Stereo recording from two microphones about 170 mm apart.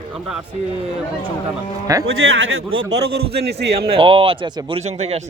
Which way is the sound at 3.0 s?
70° right (ahead or behind).